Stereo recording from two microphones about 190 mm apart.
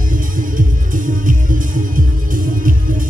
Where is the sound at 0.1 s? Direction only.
45° right (ahead or behind).